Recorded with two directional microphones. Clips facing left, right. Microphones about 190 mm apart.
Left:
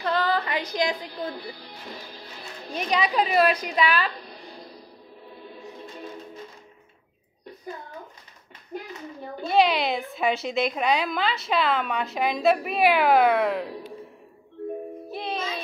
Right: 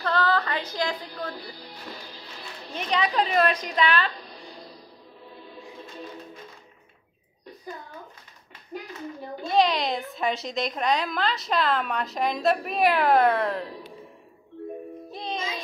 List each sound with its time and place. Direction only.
0.0 s a woman's voice: 15° left (ahead or behind)
2.7 s a woman's voice: 10° left (ahead or behind)
9.5 s a woman's voice: 5° left (ahead or behind)
15.0 s music: 5° left (ahead or behind)